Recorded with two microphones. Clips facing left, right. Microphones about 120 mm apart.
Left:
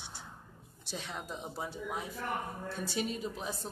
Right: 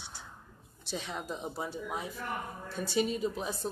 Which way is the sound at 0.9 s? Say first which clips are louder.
Right 4 dB; centre (ahead or behind).